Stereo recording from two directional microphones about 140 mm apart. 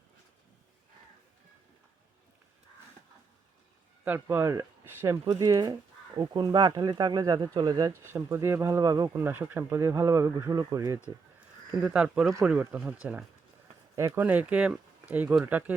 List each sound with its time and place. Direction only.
4.0 s speech: 15° right (ahead or behind)
9.1 s speech: 15° right (ahead or behind)
11.9 s speech: 5° right (ahead or behind)